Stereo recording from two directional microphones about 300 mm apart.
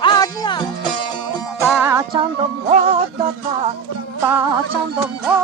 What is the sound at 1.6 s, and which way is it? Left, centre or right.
Music, centre.